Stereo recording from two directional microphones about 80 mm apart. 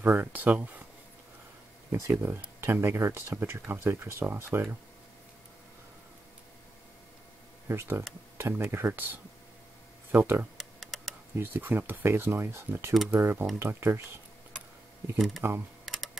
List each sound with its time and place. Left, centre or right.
0.0 s speech: right
1.9 s speech: right
7.6 s speech: right
10.6 s computer keyboard: centre
11.3 s speech: right
15.1 s speech: centre
15.8 s typing: centre